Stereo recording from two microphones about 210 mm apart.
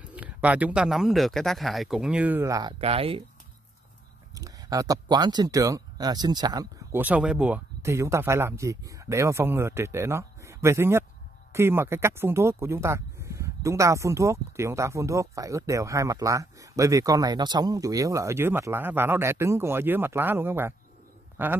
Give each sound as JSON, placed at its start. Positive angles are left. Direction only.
{"t": 0.0, "sound": "speech", "side_deg": -5}
{"t": 2.8, "sound": "speech", "side_deg": -25}
{"t": 4.4, "sound": "speech", "side_deg": -15}